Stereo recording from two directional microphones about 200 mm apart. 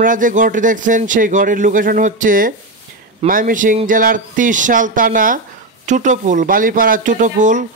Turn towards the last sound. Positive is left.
turn(degrees=-40)  # may be behind; listen again after turning